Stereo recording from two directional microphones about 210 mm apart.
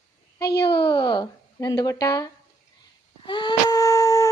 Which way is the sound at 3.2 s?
20° left (ahead or behind).